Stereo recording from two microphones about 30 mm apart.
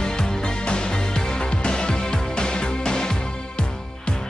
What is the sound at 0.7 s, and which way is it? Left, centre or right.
Music, left.